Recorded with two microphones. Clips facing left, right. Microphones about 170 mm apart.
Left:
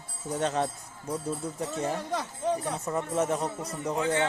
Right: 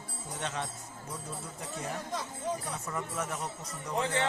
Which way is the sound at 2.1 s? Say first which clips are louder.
Left 6 dB; 65° left (ahead or behind).